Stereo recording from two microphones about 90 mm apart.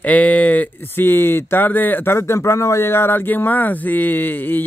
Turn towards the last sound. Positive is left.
turn(degrees=20)  # may be behind; listen again after turning